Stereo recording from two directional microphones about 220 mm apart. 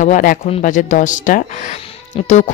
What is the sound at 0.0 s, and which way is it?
Speech, 35° left (ahead or behind).